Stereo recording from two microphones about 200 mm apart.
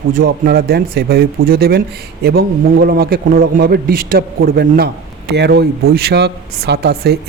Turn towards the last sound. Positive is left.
turn(degrees=-55)  # may be behind; listen again after turning